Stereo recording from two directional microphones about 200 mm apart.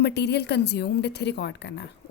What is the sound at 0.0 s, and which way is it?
A woman's voice, 55° left (ahead or behind).